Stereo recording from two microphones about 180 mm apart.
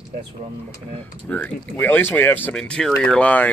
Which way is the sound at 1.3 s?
10° left (ahead or behind).